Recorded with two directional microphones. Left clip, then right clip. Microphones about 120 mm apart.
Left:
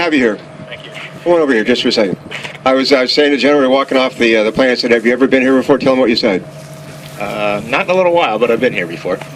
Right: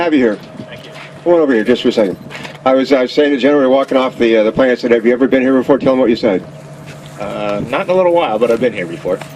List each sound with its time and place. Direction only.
0.0 s speech: 45° left (ahead or behind)